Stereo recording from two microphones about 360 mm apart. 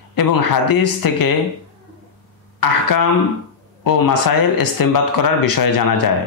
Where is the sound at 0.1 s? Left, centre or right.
Left.